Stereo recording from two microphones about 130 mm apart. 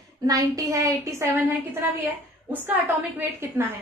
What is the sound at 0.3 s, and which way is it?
A woman's voice, 25° right (ahead or behind).